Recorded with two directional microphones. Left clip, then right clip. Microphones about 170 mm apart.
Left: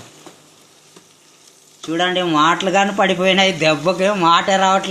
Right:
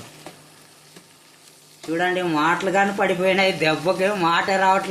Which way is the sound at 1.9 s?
50° left (ahead or behind).